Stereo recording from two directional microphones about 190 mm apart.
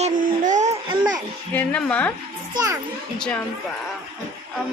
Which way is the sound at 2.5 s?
20° right (ahead or behind).